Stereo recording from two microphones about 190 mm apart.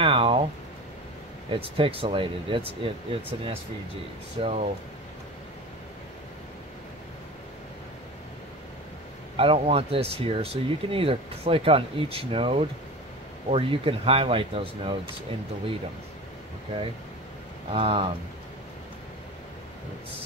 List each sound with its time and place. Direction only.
0.0 s a sound: 30° right (ahead or behind)
1.5 s speech: 30° right (ahead or behind)
9.4 s speech: 30° right (ahead or behind)
17.6 s speech: 30° right (ahead or behind)